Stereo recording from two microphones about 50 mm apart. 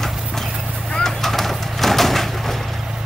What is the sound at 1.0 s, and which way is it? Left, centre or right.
Vehicle, centre.